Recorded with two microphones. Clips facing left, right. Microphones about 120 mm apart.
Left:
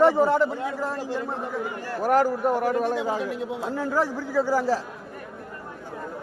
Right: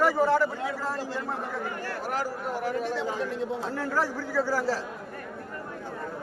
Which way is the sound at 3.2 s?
10° left (ahead or behind).